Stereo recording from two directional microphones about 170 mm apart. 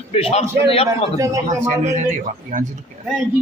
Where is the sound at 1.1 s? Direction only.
20° right (ahead or behind).